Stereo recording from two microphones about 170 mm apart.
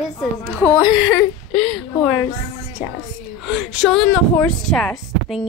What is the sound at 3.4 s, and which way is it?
Speech, 5° right (ahead or behind).